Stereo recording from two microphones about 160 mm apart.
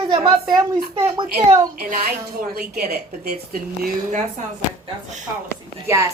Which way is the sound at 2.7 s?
70° right (ahead or behind).